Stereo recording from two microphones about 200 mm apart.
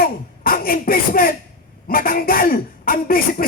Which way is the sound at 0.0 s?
45° left (ahead or behind).